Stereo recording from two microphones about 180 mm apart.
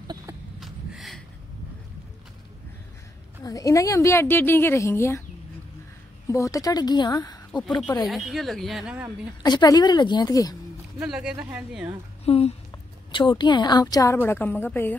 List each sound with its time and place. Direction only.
0.6 s a sound: centre (ahead or behind)
3.4 s speech: 20° left (ahead or behind)
6.2 s a woman's voice: 15° left (ahead or behind)
8.1 s a woman's voice: centre (ahead or behind)
9.4 s a woman's voice: 20° left (ahead or behind)
11.0 s a woman's voice: 5° right (ahead or behind)
12.3 s a woman's voice: 35° left (ahead or behind); by 15.0 s 10° left (ahead or behind)